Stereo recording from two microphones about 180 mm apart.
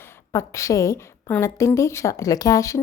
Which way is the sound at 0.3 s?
15° left (ahead or behind).